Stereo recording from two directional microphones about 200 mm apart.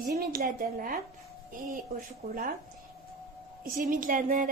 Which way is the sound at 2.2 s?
45° right (ahead or behind).